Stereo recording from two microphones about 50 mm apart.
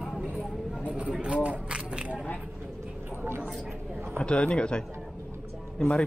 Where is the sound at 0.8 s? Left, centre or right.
Right.